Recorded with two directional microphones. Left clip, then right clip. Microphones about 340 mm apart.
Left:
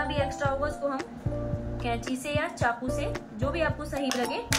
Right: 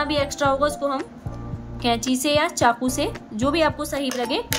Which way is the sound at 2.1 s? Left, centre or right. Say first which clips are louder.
Right 10 dB; centre.